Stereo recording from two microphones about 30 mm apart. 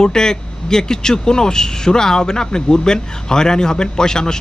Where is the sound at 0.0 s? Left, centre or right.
Left.